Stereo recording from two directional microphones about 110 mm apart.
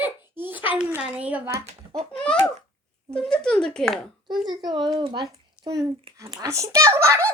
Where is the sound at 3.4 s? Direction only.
5° left (ahead or behind).